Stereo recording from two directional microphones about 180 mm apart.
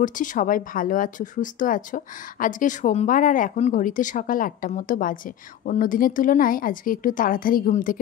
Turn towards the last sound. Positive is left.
turn(degrees=50)  # may be behind; listen again after turning